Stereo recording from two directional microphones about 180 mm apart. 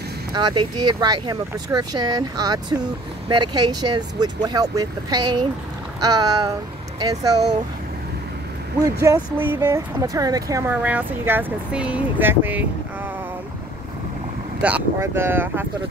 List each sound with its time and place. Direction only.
0.3 s speech: 25° right (ahead or behind)
8.8 s speech: 20° right (ahead or behind)
14.6 s speech: 10° right (ahead or behind)